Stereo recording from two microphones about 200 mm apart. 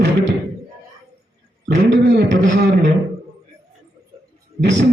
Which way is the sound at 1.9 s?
65° right (ahead or behind).